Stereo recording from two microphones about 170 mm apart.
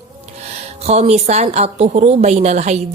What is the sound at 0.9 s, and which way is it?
Speech, 40° right (ahead or behind).